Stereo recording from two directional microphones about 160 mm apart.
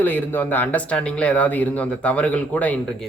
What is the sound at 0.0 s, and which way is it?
Speech, 10° left (ahead or behind).